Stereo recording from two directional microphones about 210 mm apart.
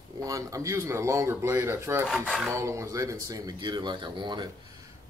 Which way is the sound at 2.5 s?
15° right (ahead or behind).